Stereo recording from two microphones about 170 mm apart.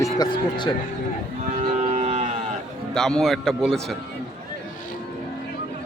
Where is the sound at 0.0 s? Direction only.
25° left (ahead or behind).